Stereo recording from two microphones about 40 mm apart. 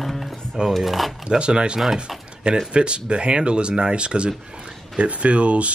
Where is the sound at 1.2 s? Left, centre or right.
Right.